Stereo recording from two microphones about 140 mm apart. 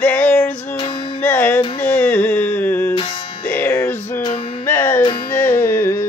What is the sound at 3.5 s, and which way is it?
Music, 10° left (ahead or behind).